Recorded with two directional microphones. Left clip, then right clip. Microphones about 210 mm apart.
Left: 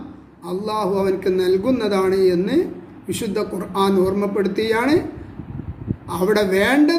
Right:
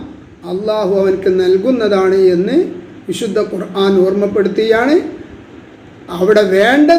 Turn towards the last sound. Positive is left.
turn(degrees=20)  # may be behind; listen again after turning